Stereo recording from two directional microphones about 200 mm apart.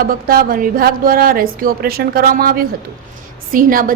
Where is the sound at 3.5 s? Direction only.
45° right (ahead or behind).